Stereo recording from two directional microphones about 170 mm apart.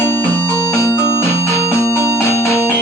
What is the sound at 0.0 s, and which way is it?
Music, 10° left (ahead or behind).